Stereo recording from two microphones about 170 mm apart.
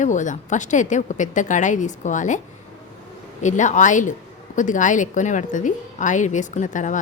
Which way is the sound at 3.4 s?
45° left (ahead or behind).